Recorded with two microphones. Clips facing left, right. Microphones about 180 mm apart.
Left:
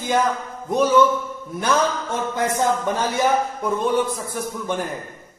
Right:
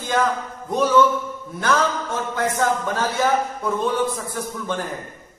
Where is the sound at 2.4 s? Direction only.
15° left (ahead or behind).